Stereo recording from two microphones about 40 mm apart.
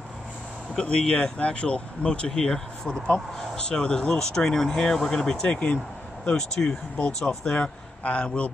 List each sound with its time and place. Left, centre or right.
0.8 s speech: left
2.3 s speech: centre
5.5 s speech: left
6.3 s speech: centre